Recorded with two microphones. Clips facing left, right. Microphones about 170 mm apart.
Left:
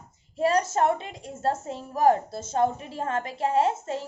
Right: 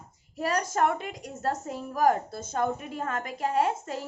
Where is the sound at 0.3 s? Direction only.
25° left (ahead or behind).